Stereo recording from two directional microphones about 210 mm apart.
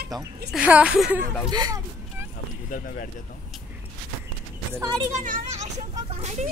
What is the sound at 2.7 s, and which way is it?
Speech, 40° left (ahead or behind).